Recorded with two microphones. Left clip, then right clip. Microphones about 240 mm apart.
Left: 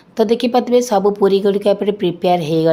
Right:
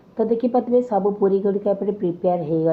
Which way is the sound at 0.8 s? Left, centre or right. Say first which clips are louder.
Left 6 dB; left.